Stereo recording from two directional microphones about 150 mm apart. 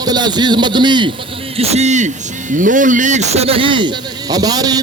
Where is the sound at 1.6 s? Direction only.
45° right (ahead or behind).